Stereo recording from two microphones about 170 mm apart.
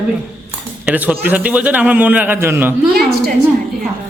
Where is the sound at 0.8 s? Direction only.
5° right (ahead or behind).